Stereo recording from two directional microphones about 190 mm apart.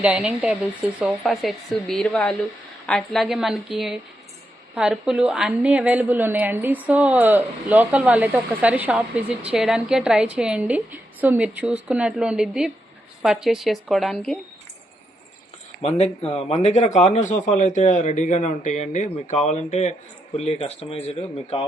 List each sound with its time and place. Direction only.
0.0 s a woman's voice: 5° right (ahead or behind)
15.8 s a man's voice: 35° left (ahead or behind)